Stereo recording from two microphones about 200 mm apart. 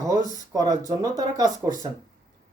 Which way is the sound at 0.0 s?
15° right (ahead or behind).